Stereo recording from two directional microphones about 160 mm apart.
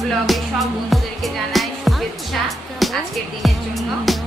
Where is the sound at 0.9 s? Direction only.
Centre (ahead or behind).